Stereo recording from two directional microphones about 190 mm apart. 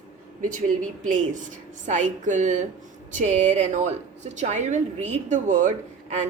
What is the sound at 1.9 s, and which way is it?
A woman's voice, 40° right (ahead or behind).